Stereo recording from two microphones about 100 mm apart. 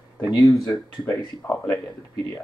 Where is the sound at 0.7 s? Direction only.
30° left (ahead or behind).